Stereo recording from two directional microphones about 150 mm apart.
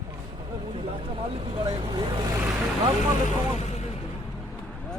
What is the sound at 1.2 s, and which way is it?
Speech, 35° right (ahead or behind).